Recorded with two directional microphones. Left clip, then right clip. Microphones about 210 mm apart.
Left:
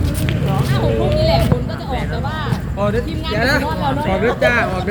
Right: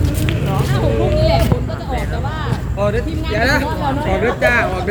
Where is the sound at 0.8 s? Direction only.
25° left (ahead or behind).